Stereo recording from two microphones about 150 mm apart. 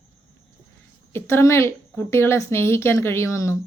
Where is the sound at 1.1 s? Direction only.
20° left (ahead or behind).